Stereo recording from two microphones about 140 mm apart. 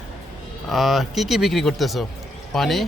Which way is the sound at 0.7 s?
Centre (ahead or behind).